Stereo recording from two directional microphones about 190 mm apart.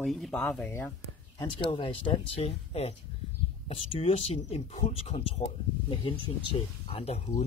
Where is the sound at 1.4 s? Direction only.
30° left (ahead or behind).